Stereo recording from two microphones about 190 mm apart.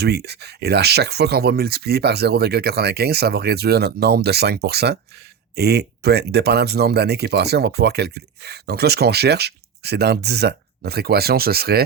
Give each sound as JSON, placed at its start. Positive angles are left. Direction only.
{"t": 0.0, "sound": "speech", "side_deg": -60}